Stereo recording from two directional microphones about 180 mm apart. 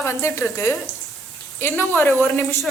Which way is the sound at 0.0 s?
15° left (ahead or behind).